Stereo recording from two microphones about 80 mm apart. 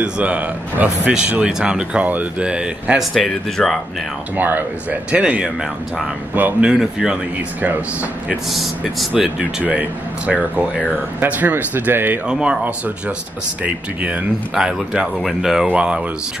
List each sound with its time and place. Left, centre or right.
0.0 s speech: centre
3.0 s speech: centre
4.4 s speech: right
6.7 s speech: centre
7.6 s speech: centre
12.3 s speech: centre
13.7 s speech: centre